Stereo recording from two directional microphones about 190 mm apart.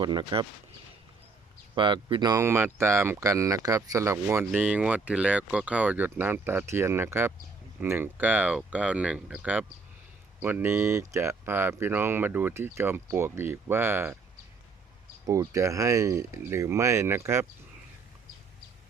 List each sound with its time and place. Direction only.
0.0 s speech: 25° right (ahead or behind)
1.7 s speech: 25° right (ahead or behind)
15.3 s speech: 15° right (ahead or behind)